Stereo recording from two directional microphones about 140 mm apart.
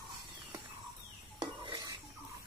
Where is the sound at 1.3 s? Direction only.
30° right (ahead or behind).